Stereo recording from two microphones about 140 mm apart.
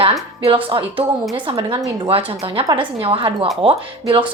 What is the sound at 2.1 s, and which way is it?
A woman's voice, 40° right (ahead or behind).